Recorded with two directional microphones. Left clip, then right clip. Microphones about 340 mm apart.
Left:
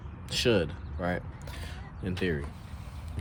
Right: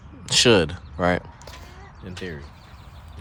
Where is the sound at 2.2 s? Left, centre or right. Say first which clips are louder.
Left 3 dB; centre.